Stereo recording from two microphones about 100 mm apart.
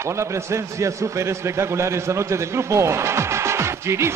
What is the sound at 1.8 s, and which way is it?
Speech, 30° right (ahead or behind).